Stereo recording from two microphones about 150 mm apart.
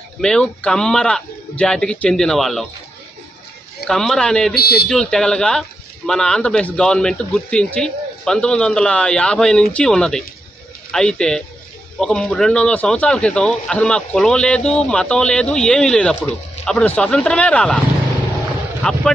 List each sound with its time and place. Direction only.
0.2 s speech: 5° left (ahead or behind)
3.8 s speech: 5° left (ahead or behind)
4.6 s speech: 90° left
4.8 s speech: 5° left (ahead or behind)